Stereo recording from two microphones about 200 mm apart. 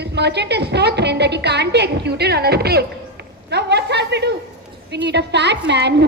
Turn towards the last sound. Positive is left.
turn(degrees=-60)  # may be behind; listen again after turning